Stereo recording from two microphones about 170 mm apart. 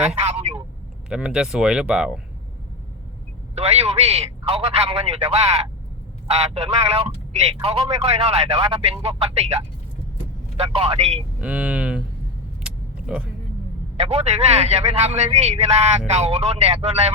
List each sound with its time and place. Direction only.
0.1 s vehicle: 40° right (ahead or behind)
1.1 s speech: 5° right (ahead or behind)
3.5 s a man's voice: 40° right (ahead or behind)
10.6 s a man's voice: 35° right (ahead or behind)
11.3 s speech: 5° right (ahead or behind)
12.6 s vehicle: 5° right (ahead or behind)
13.9 s a man's voice: 35° right (ahead or behind)